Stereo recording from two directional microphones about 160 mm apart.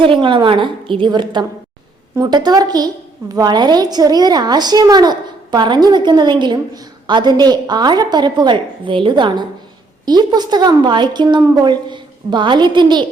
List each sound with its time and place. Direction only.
0.0 s a woman's voice: 30° right (ahead or behind)